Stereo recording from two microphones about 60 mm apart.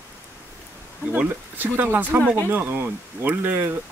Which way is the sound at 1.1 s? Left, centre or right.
Right.